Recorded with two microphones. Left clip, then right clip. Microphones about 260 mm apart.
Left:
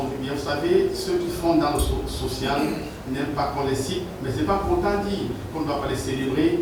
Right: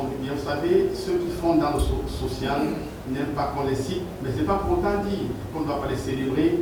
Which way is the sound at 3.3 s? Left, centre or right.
Centre.